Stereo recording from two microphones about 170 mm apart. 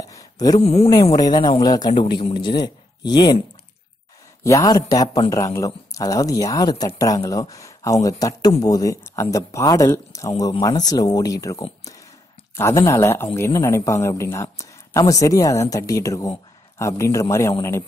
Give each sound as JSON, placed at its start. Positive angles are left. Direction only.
{"t": 0.1, "sound": "a sound", "side_deg": 20}
{"t": 0.6, "sound": "speech", "side_deg": 35}
{"t": 1.1, "sound": "speech", "side_deg": 25}